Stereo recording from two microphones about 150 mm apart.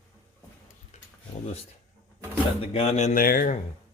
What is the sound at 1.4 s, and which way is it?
A man's voice, 45° left (ahead or behind).